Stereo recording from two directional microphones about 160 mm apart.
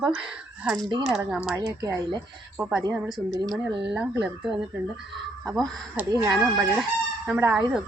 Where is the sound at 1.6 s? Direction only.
20° right (ahead or behind).